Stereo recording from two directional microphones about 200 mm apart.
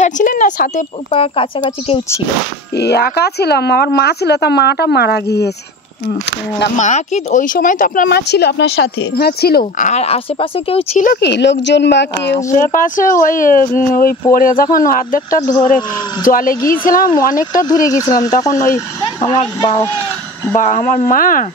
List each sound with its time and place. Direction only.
0.0 s a sound: 40° left (ahead or behind)
1.1 s speech: 25° left (ahead or behind)
2.8 s speech: 55° left (ahead or behind)
6.8 s speech: 35° left (ahead or behind)
11.1 s speech: 60° left (ahead or behind)
12.4 s speech: 40° left (ahead or behind)
17.8 s speech: 15° left (ahead or behind)
20.5 s speech: 40° left (ahead or behind)